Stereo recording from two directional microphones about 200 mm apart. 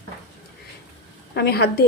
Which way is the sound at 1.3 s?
55° left (ahead or behind).